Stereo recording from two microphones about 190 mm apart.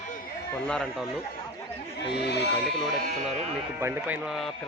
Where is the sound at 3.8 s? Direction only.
10° right (ahead or behind).